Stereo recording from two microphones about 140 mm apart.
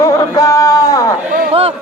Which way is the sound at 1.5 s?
45° right (ahead or behind).